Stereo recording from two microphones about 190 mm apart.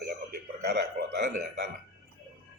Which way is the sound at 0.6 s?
60° right (ahead or behind).